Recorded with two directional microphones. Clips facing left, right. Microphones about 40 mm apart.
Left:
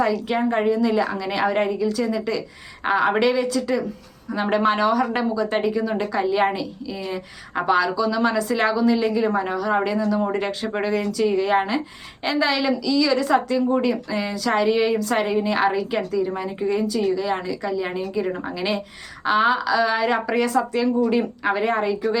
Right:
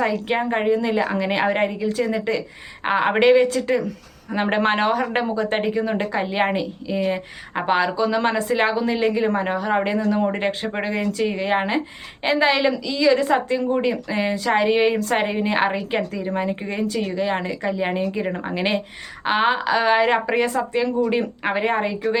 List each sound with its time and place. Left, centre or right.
0.0 s a woman's voice: right